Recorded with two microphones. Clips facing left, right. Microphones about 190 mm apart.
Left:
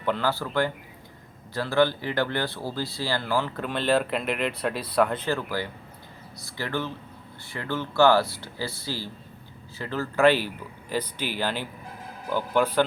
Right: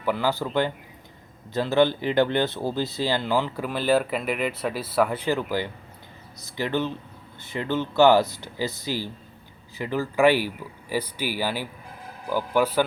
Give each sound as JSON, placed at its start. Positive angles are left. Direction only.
{"t": 0.0, "sound": "speech", "side_deg": -10}